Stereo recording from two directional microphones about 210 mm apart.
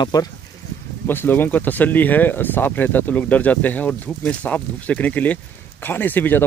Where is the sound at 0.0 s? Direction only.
20° left (ahead or behind).